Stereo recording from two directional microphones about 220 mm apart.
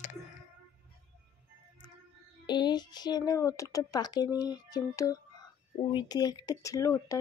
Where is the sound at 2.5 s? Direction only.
20° left (ahead or behind).